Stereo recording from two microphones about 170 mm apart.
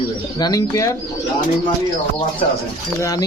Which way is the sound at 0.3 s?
20° left (ahead or behind).